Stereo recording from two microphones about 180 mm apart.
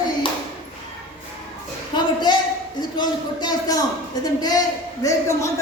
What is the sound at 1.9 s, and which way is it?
A woman's voice, 25° left (ahead or behind).